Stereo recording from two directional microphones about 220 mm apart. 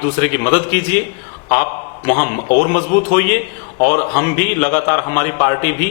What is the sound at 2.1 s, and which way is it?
A man's voice, 15° left (ahead or behind).